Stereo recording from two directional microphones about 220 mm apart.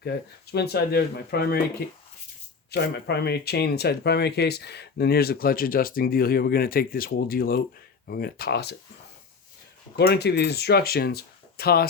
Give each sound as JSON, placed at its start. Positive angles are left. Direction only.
{"t": 0.0, "sound": "speech", "side_deg": 45}
{"t": 2.6, "sound": "speech", "side_deg": 50}
{"t": 10.0, "sound": "speech", "side_deg": 45}